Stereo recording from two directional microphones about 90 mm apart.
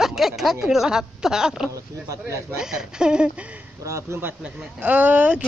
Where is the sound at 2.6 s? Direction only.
5° right (ahead or behind).